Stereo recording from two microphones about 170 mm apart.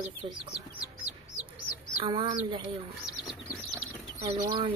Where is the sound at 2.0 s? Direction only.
25° right (ahead or behind).